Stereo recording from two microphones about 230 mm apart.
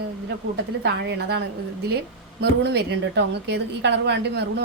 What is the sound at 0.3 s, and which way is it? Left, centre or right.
A woman's voice, right.